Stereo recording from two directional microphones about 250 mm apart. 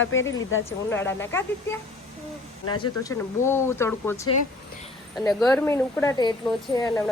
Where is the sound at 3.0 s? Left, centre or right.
Centre.